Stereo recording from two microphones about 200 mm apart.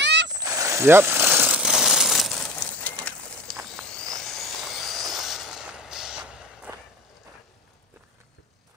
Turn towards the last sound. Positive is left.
turn(degrees=-5)  # may be behind; listen again after turning